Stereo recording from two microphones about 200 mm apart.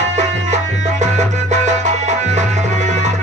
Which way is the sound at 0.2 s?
35° right (ahead or behind).